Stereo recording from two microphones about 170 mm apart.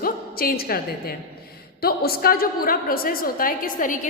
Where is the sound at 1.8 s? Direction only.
65° left (ahead or behind).